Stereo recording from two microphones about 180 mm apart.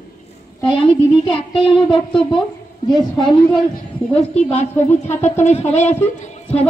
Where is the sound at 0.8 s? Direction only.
30° left (ahead or behind).